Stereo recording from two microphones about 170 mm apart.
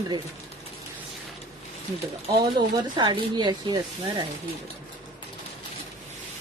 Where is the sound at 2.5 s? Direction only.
30° right (ahead or behind).